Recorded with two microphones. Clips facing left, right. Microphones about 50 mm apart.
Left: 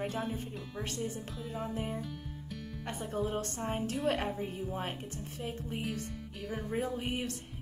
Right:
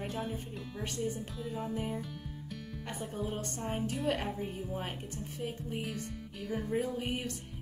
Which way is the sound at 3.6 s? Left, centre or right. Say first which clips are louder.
Even; centre.